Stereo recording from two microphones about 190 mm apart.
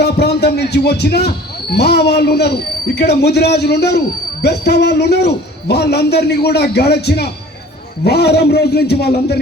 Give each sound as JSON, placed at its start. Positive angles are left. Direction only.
{"t": 0.0, "sound": "a man's voice", "side_deg": 60}